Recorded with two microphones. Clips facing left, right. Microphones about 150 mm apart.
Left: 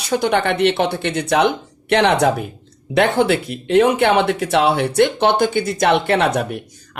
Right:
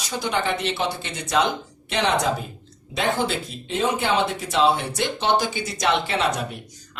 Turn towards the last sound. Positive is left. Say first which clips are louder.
# left 7 dB
turn(degrees=60)  # may be behind; listen again after turning